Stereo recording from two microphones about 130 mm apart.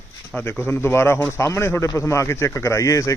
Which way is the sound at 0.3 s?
15° left (ahead or behind).